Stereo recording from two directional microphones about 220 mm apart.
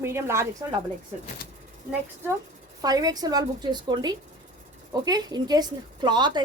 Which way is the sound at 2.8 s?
15° right (ahead or behind).